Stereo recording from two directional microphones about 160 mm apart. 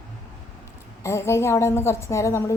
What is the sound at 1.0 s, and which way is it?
A woman's voice, 15° left (ahead or behind).